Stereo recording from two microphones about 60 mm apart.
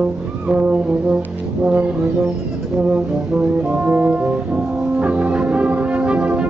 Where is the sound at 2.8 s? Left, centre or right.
Right.